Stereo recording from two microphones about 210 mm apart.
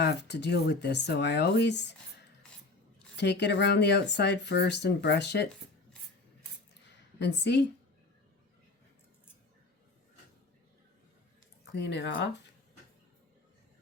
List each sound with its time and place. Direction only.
0.0 s speech: 55° left (ahead or behind)
3.2 s speech: 55° left (ahead or behind)
7.2 s speech: 55° left (ahead or behind)
11.7 s speech: 55° left (ahead or behind)